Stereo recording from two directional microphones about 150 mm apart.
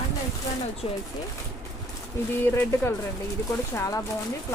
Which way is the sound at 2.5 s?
20° left (ahead or behind).